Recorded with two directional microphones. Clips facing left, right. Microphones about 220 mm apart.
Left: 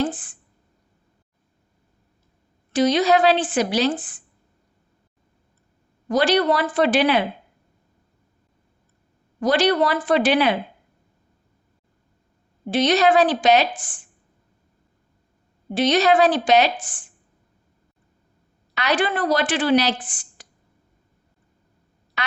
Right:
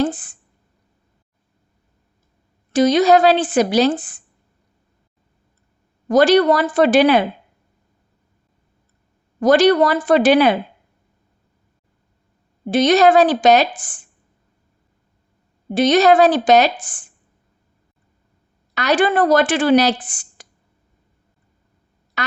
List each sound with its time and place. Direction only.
0.0 s a woman's voice: 40° right (ahead or behind)
2.7 s a woman's voice: 45° right (ahead or behind)
6.1 s speech: 45° right (ahead or behind)
9.4 s speech: 45° right (ahead or behind)
12.7 s speech: 45° right (ahead or behind)
15.7 s speech: 45° right (ahead or behind)
18.7 s speech: 40° right (ahead or behind)